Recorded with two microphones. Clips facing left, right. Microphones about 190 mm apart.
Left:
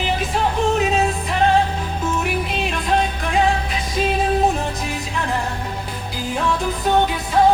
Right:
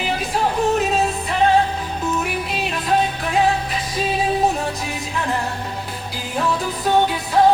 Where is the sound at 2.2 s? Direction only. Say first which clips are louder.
Left 2 dB; centre (ahead or behind).